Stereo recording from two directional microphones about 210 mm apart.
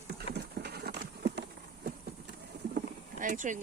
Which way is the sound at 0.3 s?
50° right (ahead or behind).